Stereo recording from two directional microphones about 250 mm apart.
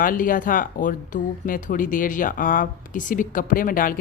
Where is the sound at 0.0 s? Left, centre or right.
Left.